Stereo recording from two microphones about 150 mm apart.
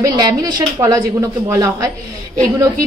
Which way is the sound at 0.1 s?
30° right (ahead or behind).